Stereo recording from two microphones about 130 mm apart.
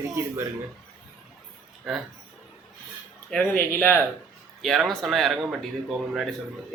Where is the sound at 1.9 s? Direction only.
Centre (ahead or behind).